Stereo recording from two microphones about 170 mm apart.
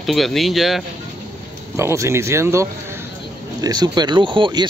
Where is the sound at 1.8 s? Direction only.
15° right (ahead or behind).